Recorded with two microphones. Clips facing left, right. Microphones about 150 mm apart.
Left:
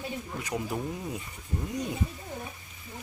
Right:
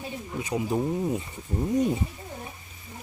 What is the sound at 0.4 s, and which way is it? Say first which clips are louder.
Speech: right 6 dB; 15° right (ahead or behind).